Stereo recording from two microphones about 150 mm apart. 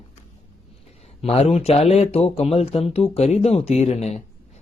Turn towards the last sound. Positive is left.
turn(degrees=45)  # may be behind; listen again after turning